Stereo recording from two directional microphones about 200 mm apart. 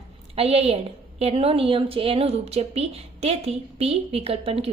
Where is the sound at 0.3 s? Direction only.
30° right (ahead or behind).